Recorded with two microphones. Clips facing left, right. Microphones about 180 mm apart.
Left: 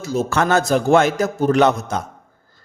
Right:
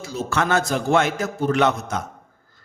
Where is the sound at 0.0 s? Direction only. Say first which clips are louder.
Left 5 dB; 45° left (ahead or behind).